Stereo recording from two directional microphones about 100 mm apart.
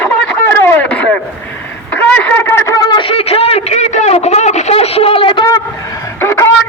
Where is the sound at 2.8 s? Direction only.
45° left (ahead or behind).